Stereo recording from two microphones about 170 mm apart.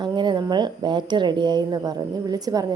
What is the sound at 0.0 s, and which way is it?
Speech, 25° right (ahead or behind).